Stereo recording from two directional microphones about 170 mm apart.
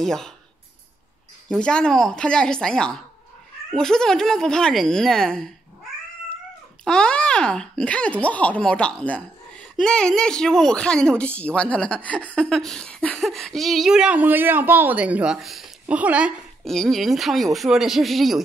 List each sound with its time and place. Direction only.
0.0 s speech: centre (ahead or behind)
1.5 s speech: 5° left (ahead or behind)
6.8 s speech: 5° left (ahead or behind)